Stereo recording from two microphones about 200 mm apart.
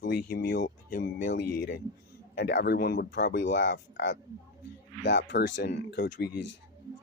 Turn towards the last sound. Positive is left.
turn(degrees=60)  # may be behind; listen again after turning